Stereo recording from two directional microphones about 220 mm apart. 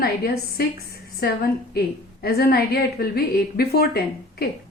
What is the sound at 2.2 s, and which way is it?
A woman's voice, 45° left (ahead or behind).